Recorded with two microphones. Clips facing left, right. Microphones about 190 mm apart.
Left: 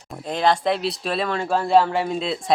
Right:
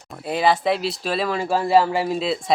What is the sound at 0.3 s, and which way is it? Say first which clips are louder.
Speech: right 1 dB; 5° right (ahead or behind).